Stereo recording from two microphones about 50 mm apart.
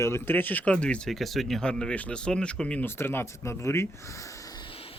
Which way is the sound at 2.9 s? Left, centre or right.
Left.